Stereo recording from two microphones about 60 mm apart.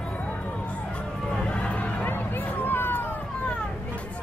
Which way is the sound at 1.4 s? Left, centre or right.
Centre.